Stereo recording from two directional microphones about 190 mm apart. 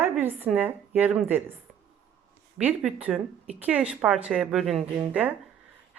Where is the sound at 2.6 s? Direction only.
10° right (ahead or behind).